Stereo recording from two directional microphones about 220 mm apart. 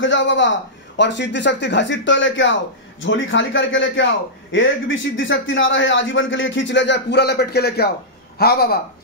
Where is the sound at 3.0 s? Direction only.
60° left (ahead or behind).